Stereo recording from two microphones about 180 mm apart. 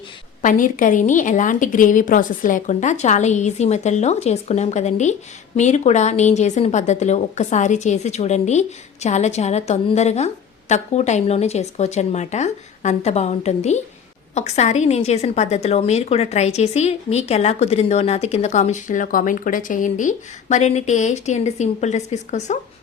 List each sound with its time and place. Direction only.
0.4 s a woman's voice: 45° left (ahead or behind)